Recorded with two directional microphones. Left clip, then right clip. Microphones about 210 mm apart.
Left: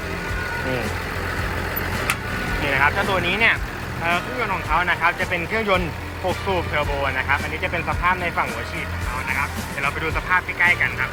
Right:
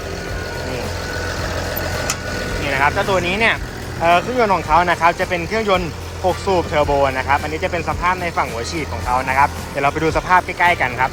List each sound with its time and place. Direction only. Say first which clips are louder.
2.6 s speech: right 2 dB; 10° right (ahead or behind)